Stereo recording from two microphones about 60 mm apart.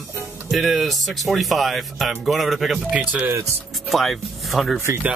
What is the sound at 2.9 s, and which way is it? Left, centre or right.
Speech, right.